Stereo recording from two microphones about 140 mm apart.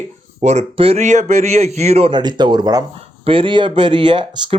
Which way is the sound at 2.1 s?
30° right (ahead or behind).